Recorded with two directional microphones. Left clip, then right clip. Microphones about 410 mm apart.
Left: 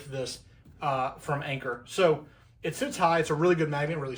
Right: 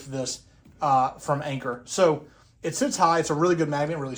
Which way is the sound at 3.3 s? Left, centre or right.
Centre.